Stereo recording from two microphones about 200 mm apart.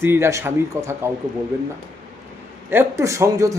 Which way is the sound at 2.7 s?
10° right (ahead or behind).